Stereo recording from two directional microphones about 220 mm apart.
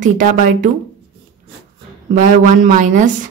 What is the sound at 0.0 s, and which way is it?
Speech, 35° right (ahead or behind).